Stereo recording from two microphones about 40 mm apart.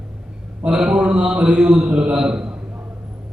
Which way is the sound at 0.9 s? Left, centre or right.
Right.